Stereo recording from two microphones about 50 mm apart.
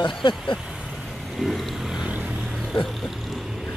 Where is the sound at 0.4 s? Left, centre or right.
Centre.